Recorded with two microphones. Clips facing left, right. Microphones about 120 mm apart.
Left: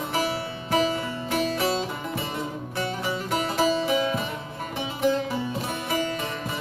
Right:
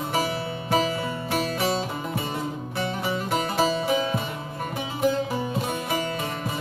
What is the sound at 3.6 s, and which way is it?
Music, 30° right (ahead or behind).